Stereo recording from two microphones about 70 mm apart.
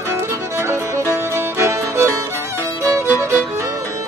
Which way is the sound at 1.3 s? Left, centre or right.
Right.